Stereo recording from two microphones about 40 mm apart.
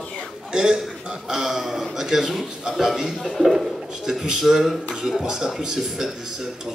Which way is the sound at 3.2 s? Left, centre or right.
Centre.